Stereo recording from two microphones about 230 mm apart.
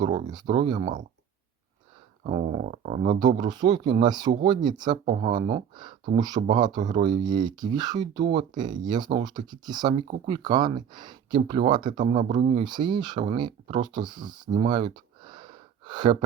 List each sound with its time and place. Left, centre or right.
0.3 s speech: centre
2.2 s speech: right
3.2 s speech: centre
12.1 s speech: right